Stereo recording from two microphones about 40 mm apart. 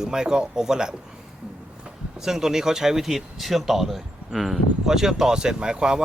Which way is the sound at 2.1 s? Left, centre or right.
Centre.